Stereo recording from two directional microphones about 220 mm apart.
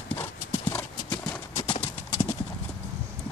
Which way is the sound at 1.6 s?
30° left (ahead or behind).